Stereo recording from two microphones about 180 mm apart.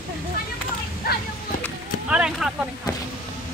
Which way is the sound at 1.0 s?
55° left (ahead or behind).